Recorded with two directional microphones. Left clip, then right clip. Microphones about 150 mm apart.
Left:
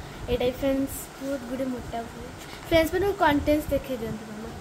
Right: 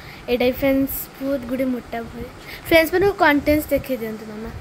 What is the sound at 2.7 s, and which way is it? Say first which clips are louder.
Speech: right 7 dB; 60° right (ahead or behind).